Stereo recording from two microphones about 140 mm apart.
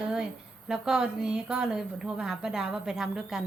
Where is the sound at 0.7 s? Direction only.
5° right (ahead or behind).